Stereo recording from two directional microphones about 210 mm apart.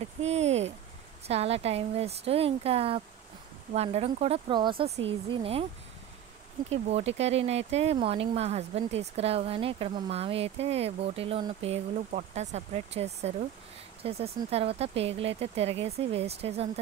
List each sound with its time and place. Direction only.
0.2 s a sound: 30° right (ahead or behind)
1.2 s speech: 30° right (ahead or behind)
6.7 s speech: 30° right (ahead or behind)